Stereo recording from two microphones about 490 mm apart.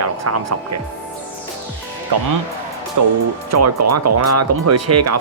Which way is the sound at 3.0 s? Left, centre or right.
Right.